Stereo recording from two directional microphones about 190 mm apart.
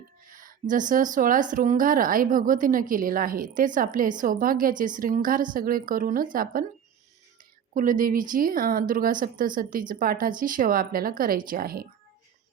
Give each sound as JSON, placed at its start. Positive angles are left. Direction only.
{"t": 0.3, "sound": "speech", "side_deg": -45}
{"t": 7.7, "sound": "speech", "side_deg": -45}